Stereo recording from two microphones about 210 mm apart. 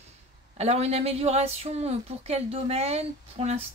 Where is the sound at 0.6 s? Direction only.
30° right (ahead or behind).